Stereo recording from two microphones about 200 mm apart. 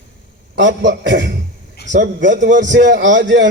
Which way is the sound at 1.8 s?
55° left (ahead or behind).